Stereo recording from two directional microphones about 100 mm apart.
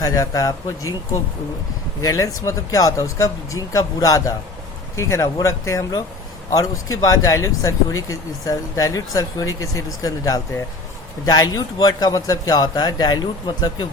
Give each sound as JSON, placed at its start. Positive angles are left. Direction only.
{"t": 0.0, "sound": "speech", "side_deg": 35}